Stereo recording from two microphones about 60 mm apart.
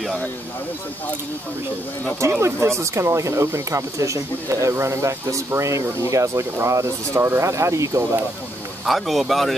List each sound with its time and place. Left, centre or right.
2.4 s speech: right
8.8 s speech: centre